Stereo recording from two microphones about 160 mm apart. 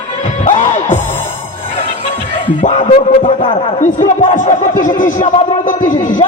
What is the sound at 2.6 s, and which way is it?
Speech, 55° left (ahead or behind).